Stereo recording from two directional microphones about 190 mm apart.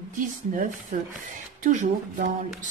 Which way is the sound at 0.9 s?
45° right (ahead or behind).